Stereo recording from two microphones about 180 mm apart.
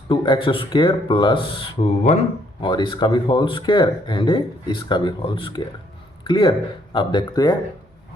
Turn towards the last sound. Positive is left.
turn(degrees=20)  # may be behind; listen again after turning